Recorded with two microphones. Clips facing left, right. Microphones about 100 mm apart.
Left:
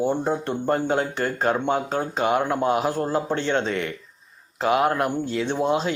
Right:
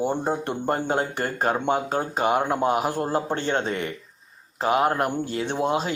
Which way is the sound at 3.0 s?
45° right (ahead or behind).